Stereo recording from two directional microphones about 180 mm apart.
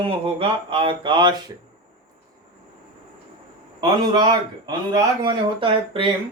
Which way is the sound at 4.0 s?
25° right (ahead or behind).